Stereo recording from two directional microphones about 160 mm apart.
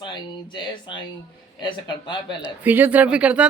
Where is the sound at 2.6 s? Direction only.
10° right (ahead or behind).